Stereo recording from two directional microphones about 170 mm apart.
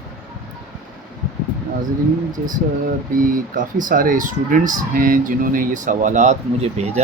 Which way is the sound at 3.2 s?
55° right (ahead or behind).